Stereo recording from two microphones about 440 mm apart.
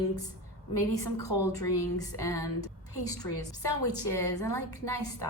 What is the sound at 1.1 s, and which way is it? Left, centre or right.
A woman's voice, centre.